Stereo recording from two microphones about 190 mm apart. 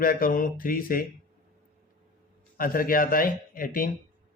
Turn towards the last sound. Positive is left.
turn(degrees=45)  # may be behind; listen again after turning